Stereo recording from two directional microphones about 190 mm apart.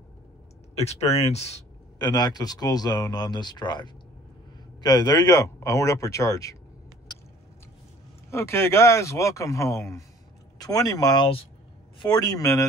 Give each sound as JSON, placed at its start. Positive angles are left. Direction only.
{"t": 0.7, "sound": "speech", "side_deg": 35}
{"t": 2.0, "sound": "speech", "side_deg": 20}
{"t": 8.3, "sound": "speech", "side_deg": 15}